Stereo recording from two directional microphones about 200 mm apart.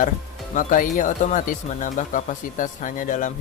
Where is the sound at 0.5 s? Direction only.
40° left (ahead or behind).